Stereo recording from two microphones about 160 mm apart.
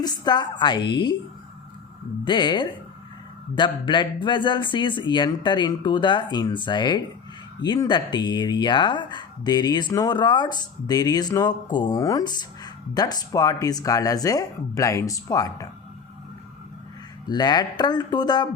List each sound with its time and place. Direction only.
0.0 s speech: 25° left (ahead or behind)
2.2 s speech: 30° left (ahead or behind)
17.2 s speech: 25° left (ahead or behind)